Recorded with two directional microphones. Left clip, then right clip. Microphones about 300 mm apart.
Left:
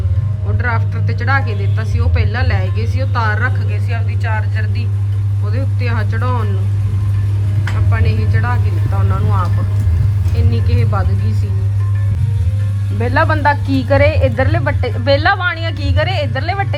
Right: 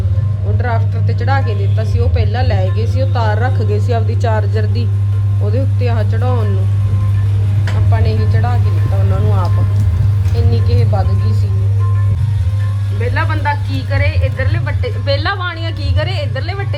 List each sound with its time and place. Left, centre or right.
0.6 s speech: centre
7.7 s speech: centre
13.0 s speech: centre